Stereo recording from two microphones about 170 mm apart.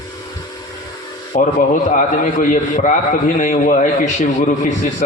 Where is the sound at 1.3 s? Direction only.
50° left (ahead or behind).